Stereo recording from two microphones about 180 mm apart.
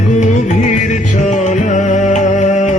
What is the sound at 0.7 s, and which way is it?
Music, 45° left (ahead or behind).